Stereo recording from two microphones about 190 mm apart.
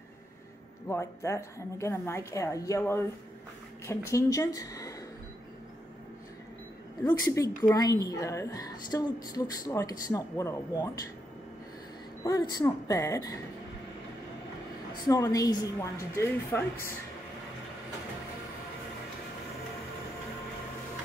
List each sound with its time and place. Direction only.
0.8 s a woman's voice: 15° left (ahead or behind)
7.1 s speech: 15° left (ahead or behind)
12.3 s a woman's voice: 20° left (ahead or behind)
15.0 s a woman's voice: 20° left (ahead or behind)